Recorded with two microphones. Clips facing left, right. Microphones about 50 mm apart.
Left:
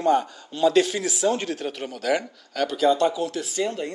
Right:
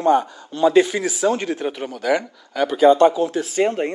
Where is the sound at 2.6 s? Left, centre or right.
Right.